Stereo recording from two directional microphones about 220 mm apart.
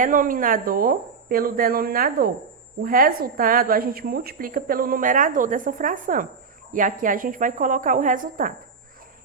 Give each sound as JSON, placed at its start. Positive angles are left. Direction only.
{"t": 0.0, "sound": "a woman's voice", "side_deg": -40}